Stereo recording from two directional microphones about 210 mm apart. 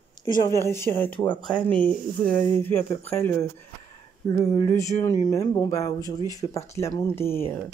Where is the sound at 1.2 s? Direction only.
20° left (ahead or behind).